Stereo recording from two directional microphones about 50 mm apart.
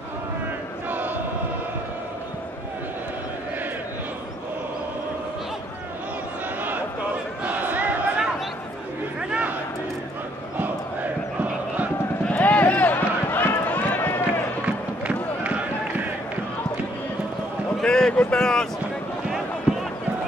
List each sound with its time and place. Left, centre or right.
0.8 s chant: right
7.4 s crowd: right
10.6 s crowd: right
12.3 s run: left
12.9 s run: left
15.4 s a sound: right
17.8 s a sound: centre